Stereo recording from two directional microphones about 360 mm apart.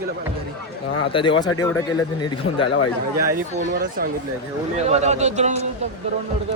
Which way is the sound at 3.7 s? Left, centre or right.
Right.